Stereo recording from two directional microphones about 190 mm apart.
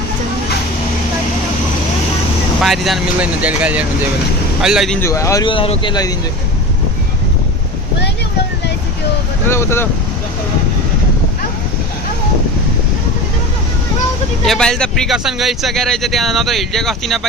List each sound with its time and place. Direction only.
2.6 s speech: centre (ahead or behind)
4.9 s speech: 15° left (ahead or behind)
9.5 s speech: 15° left (ahead or behind)
14.4 s speech: centre (ahead or behind)